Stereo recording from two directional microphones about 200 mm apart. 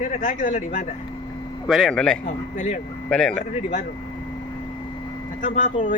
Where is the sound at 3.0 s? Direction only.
5° left (ahead or behind).